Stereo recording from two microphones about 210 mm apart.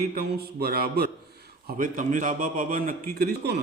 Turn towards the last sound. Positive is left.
turn(degrees=-50)  # may be behind; listen again after turning